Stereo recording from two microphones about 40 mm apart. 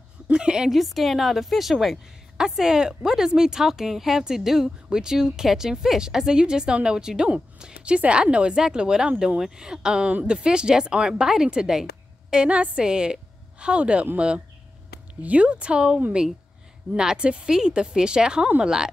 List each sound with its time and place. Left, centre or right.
0.3 s a woman's voice: right
0.7 s a woman's voice: centre
2.3 s a woman's voice: centre
12.4 s a woman's voice: right
12.8 s a woman's voice: centre